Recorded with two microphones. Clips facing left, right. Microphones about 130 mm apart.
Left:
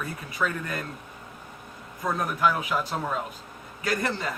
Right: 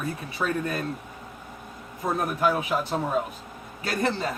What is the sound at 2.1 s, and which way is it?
Speech, 25° right (ahead or behind).